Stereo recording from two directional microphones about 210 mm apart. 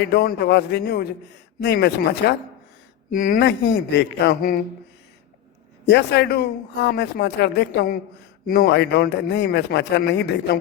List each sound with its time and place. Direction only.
0.0 s speech: 50° left (ahead or behind)
3.1 s speech: 40° left (ahead or behind)
5.9 s speech: 55° left (ahead or behind)